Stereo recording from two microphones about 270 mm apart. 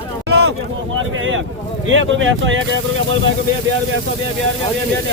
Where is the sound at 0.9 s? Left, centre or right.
Right.